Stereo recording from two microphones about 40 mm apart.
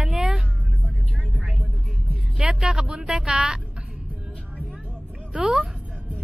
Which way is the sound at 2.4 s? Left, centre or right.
Centre.